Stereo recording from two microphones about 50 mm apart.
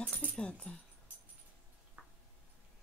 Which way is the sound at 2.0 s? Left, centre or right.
Right.